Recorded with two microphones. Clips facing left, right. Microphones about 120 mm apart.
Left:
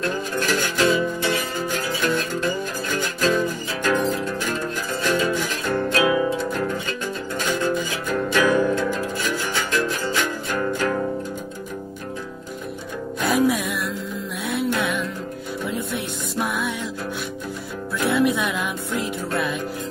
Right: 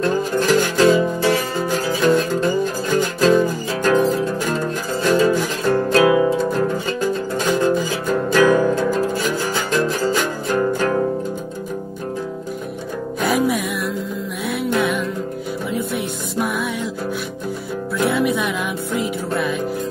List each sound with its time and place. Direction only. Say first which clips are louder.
0.0 s music: right 6 dB; 30° right (ahead or behind)
13.2 s music: right 1 dB; centre (ahead or behind)
17.9 s music: right 1 dB; centre (ahead or behind)